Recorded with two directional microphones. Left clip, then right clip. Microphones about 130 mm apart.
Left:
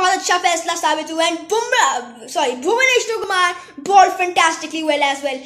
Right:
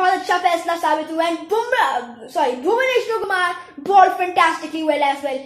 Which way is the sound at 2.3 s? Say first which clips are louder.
Even; 20° left (ahead or behind).